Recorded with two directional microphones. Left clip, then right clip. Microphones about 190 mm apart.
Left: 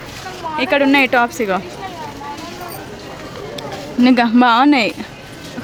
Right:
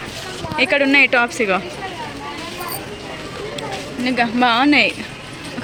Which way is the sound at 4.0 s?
45° left (ahead or behind).